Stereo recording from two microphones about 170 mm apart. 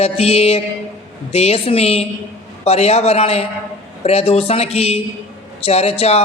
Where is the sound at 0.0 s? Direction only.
40° left (ahead or behind).